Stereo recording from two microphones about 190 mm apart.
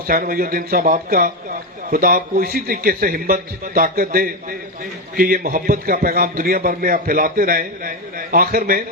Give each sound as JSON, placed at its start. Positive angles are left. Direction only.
{"t": 0.1, "sound": "a man's voice", "side_deg": -50}